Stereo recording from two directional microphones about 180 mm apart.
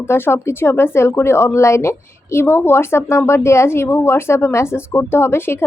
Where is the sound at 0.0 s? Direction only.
15° left (ahead or behind).